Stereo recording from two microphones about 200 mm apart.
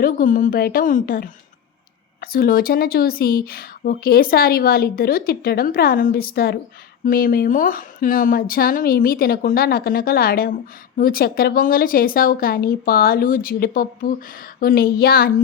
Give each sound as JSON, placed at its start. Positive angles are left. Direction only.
{"t": 0.0, "sound": "speech", "side_deg": 40}